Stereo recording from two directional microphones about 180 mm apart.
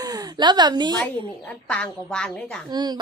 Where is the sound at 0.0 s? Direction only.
20° right (ahead or behind).